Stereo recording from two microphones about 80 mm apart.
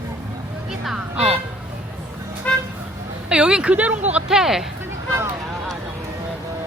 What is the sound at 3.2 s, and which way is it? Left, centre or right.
Speech, centre.